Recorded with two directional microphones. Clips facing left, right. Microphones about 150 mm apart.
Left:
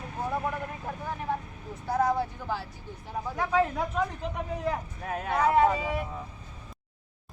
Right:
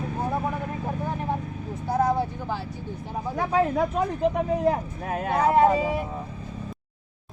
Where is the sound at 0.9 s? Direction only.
25° right (ahead or behind).